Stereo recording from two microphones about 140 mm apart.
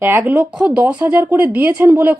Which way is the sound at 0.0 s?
15° right (ahead or behind).